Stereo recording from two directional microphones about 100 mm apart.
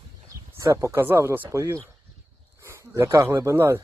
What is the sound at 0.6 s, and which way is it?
Speech, 30° right (ahead or behind).